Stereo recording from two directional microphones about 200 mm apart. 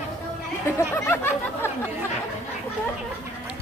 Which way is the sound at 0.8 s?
10° left (ahead or behind).